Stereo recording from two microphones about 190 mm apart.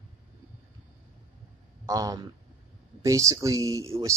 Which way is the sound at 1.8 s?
15° right (ahead or behind).